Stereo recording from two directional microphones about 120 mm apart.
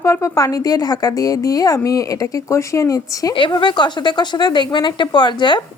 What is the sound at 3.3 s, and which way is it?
Speech, 40° left (ahead or behind).